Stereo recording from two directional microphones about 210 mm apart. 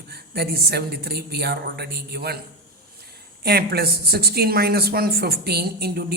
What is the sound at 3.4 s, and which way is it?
Speech, 50° right (ahead or behind).